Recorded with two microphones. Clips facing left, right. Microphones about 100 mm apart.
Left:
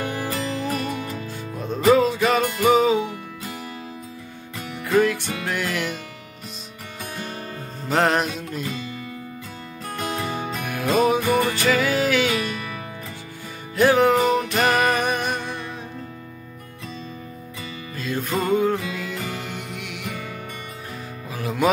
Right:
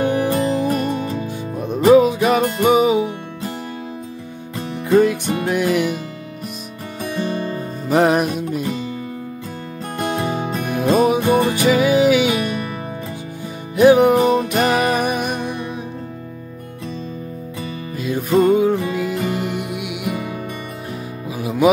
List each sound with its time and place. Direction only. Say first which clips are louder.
0.0 s music: right 9 dB; 20° right (ahead or behind)
4.6 s music: right 5 dB; 30° right (ahead or behind)
7.0 s music: right 10 dB; 30° right (ahead or behind)
7.9 s music: right 5 dB; 15° right (ahead or behind)
10.0 s music: right 6 dB; 20° right (ahead or behind)
11.5 s music: right 6 dB; 15° right (ahead or behind)
13.7 s music: right 5 dB; 15° right (ahead or behind)
17.9 s music: right 8 dB; 15° right (ahead or behind)
21.4 s music: right 4 dB; 10° right (ahead or behind)